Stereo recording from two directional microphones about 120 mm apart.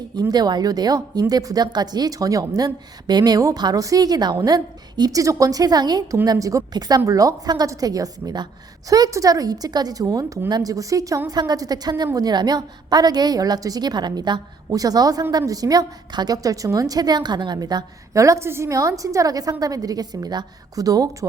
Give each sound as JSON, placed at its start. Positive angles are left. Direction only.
{"t": 0.2, "sound": "a woman's voice", "side_deg": -35}